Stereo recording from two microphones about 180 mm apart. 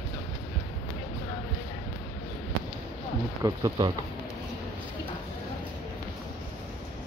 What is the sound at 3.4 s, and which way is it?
Speech, 25° right (ahead or behind).